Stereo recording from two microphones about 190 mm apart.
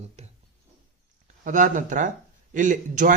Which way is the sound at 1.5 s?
40° right (ahead or behind).